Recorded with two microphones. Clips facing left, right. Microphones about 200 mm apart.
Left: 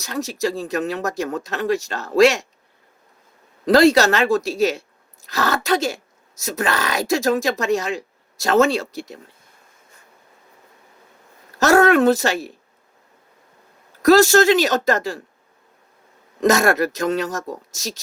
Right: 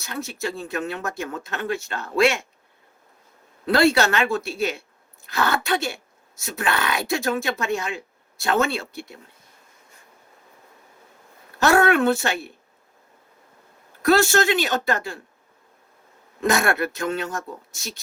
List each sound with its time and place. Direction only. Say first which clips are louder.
0.3 s speech: left 6 dB; 40° left (ahead or behind)
3.8 s speech: left 5 dB; 40° left (ahead or behind)
11.6 s speech: left 4 dB; 40° left (ahead or behind)
14.0 s speech: left 6 dB; 40° left (ahead or behind)
16.4 s speech: left 5 dB; 40° left (ahead or behind)